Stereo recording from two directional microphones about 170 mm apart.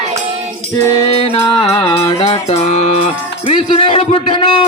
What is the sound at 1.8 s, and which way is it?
A man's voice, 35° left (ahead or behind).